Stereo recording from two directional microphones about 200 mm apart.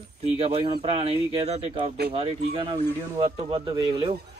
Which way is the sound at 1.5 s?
35° right (ahead or behind).